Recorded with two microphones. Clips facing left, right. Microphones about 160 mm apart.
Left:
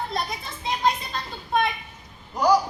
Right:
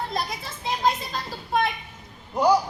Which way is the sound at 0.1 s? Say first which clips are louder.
Even; centre (ahead or behind).